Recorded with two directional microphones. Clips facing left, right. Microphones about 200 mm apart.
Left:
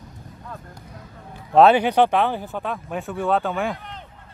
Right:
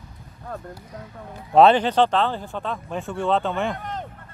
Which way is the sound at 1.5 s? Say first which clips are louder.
Even; centre (ahead or behind).